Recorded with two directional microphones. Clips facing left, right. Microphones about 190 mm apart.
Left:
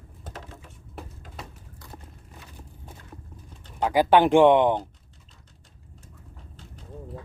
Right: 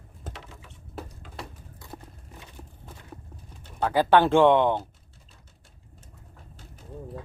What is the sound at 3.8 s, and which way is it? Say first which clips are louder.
Speech: left 1 dB; 15° left (ahead or behind).